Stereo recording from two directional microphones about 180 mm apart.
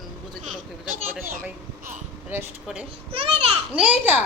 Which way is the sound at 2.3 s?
15° right (ahead or behind).